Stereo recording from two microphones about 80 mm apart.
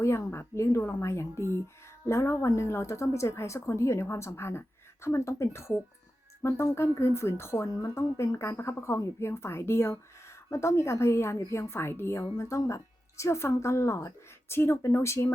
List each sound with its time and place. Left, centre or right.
0.0 s speech: left
12.2 s speech: left